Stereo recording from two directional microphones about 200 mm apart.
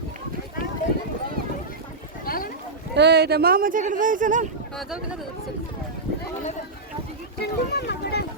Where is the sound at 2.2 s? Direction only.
45° left (ahead or behind).